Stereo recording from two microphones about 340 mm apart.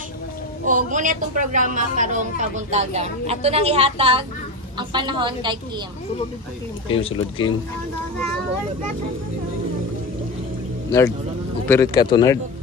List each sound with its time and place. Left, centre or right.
0.7 s a woman's voice: right
6.9 s speech: centre
11.7 s speech: centre